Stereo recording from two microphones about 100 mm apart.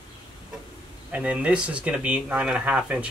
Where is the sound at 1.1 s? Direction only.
10° right (ahead or behind).